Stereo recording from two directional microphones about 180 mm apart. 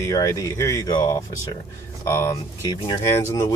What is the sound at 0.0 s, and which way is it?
Speech, 15° left (ahead or behind).